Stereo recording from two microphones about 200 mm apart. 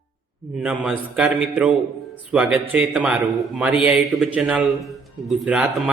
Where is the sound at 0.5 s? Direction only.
5° right (ahead or behind).